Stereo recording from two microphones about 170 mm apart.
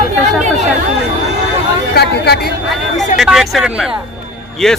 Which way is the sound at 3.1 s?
Centre (ahead or behind).